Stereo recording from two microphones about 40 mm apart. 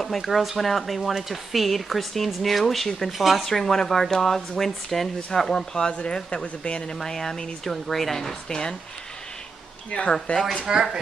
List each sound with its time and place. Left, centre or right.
0.0 s speech: centre
3.4 s speech: centre
5.5 s speech: centre
7.0 s speech: centre
9.8 s speech: left
10.6 s speech: centre